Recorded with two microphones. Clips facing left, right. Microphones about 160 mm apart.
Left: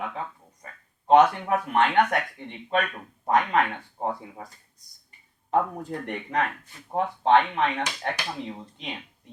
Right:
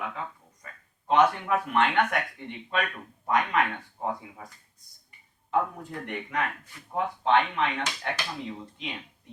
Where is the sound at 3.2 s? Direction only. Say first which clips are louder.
Left 3 dB; 40° left (ahead or behind).